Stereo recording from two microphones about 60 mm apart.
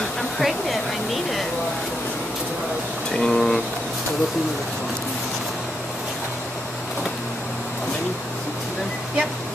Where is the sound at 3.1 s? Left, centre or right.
Centre.